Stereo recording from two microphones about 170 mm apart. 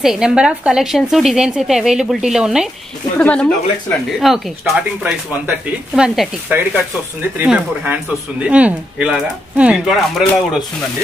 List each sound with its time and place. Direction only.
0.0 s a woman's voice: 5° right (ahead or behind)
3.2 s a woman's voice: 5° left (ahead or behind)